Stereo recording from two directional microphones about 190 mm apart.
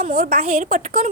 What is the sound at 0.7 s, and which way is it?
Speech, 45° right (ahead or behind).